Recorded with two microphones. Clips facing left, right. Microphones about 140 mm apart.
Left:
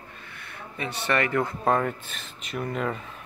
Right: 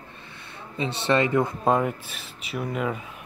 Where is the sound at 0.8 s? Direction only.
25° right (ahead or behind).